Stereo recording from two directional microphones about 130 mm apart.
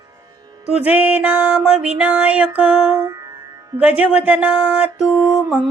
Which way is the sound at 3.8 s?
10° right (ahead or behind).